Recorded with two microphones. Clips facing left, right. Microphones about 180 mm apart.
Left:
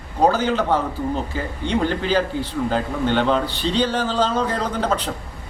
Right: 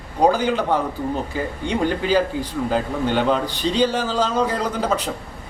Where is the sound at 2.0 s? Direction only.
10° right (ahead or behind).